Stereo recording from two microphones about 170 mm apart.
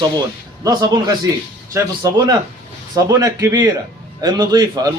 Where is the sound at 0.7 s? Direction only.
25° right (ahead or behind).